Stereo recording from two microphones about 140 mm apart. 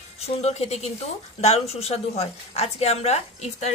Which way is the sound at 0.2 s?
50° left (ahead or behind).